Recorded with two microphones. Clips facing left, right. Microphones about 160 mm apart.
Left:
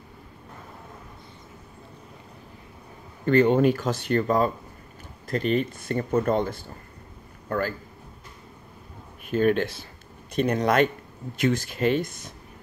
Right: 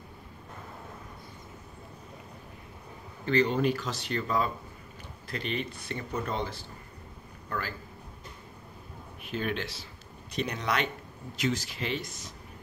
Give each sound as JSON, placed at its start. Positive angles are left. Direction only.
{"t": 3.3, "sound": "a man's voice", "side_deg": 50}
{"t": 9.2, "sound": "speech", "side_deg": 50}